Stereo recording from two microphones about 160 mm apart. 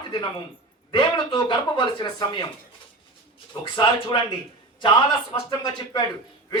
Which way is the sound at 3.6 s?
30° left (ahead or behind).